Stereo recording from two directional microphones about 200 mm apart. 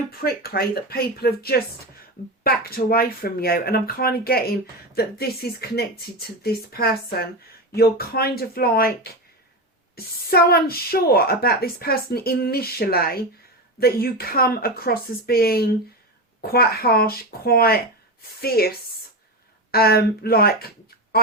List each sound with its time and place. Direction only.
0.2 s speech: 50° left (ahead or behind)
19.7 s speech: 50° left (ahead or behind)